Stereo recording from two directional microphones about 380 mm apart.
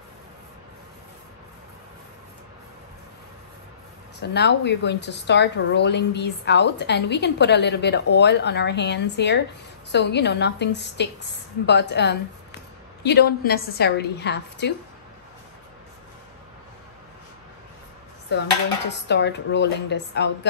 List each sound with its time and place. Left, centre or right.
4.2 s a woman's voice: left
18.3 s a woman's voice: left